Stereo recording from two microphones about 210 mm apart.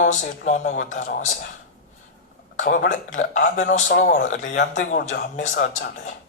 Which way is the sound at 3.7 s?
40° left (ahead or behind).